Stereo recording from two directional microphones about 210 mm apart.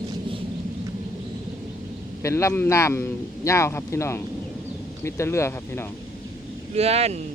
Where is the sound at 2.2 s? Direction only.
15° left (ahead or behind).